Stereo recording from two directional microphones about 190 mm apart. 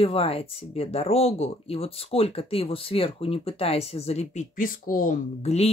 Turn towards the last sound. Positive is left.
turn(degrees=35)  # may be behind; listen again after turning